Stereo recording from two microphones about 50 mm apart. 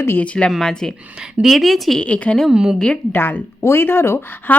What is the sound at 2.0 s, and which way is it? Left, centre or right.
Speech, left.